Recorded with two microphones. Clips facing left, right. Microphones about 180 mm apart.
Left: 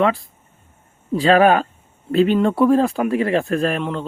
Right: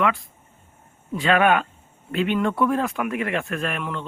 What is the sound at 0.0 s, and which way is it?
Speech, 35° left (ahead or behind).